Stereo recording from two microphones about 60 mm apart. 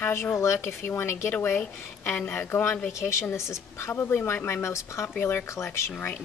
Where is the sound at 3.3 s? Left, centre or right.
Left.